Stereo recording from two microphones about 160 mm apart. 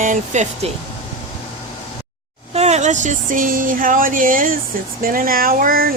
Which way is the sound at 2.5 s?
45° right (ahead or behind).